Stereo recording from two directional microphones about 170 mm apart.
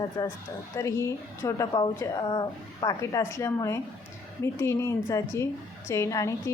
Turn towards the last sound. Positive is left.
turn(degrees=20)  # may be behind; listen again after turning